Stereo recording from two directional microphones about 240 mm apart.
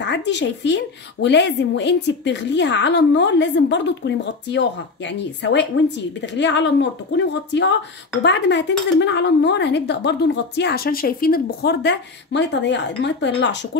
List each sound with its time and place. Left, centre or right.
0.0 s speech: left